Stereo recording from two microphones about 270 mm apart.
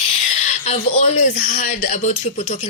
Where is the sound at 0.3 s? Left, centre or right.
Left.